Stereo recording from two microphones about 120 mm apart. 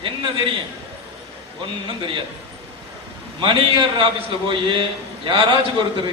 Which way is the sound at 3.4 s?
45° right (ahead or behind).